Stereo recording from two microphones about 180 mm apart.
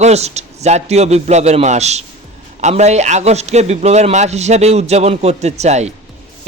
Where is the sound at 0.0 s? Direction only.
35° right (ahead or behind).